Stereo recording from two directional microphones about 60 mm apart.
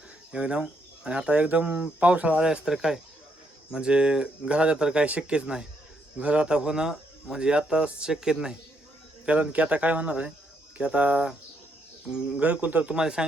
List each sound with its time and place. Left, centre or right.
0.3 s speech: centre
12.4 s speech: right
12.9 s speech: centre